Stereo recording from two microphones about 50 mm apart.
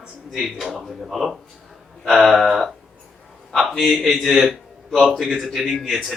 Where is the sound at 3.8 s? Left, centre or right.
Centre.